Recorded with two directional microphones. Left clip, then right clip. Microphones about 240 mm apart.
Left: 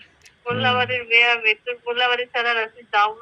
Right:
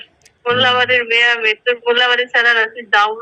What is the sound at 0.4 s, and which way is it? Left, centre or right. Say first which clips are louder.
A man's voice: right 7 dB; right.